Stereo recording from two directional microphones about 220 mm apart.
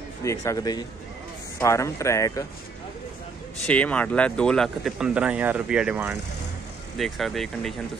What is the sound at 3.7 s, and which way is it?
Speech, 5° left (ahead or behind).